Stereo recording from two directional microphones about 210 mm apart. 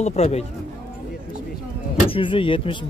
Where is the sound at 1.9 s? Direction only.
25° left (ahead or behind).